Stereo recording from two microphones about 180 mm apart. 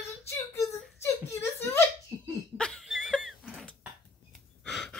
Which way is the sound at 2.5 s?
5° left (ahead or behind).